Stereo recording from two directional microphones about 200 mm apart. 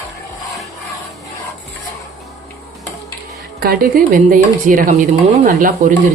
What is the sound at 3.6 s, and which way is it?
Speech, 45° right (ahead or behind).